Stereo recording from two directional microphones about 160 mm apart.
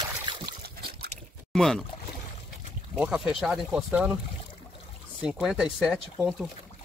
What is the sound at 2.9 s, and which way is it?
Speech, 5° right (ahead or behind).